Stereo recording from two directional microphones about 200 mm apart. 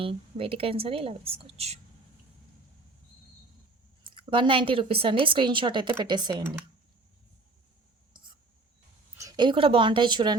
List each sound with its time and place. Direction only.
0.0 s a woman's voice: 25° right (ahead or behind)
4.0 s a woman's voice: 25° right (ahead or behind)
9.1 s a woman's voice: 20° right (ahead or behind)